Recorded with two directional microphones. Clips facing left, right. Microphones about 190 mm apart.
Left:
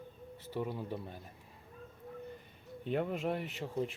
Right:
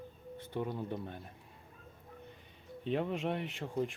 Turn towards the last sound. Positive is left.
turn(degrees=0)  # may be behind; listen again after turning